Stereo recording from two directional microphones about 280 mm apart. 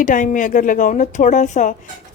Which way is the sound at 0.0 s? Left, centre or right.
Left.